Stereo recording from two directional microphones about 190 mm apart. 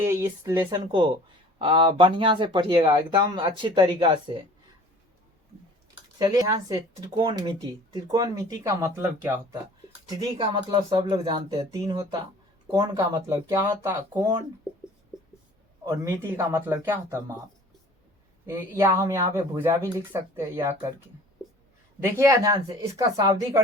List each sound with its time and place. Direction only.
0.0 s speech: 15° right (ahead or behind)
6.1 s speech: 20° right (ahead or behind)
10.3 s speech: 30° right (ahead or behind)
15.8 s speech: 15° right (ahead or behind)
18.4 s speech: 15° right (ahead or behind)
22.0 s speech: 15° right (ahead or behind)